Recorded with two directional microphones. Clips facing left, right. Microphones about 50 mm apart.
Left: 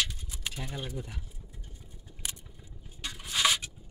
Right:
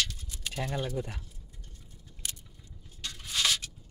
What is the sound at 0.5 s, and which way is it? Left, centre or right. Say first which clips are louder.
Speech: right 9 dB; right.